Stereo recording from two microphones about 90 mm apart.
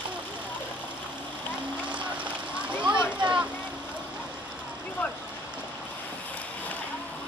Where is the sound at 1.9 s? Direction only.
15° right (ahead or behind).